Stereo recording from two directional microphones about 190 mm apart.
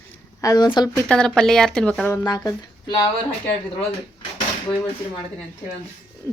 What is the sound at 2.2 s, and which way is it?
Speech, 20° left (ahead or behind).